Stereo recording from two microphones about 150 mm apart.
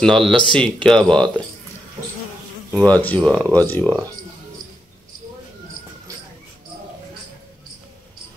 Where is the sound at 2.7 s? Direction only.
10° left (ahead or behind).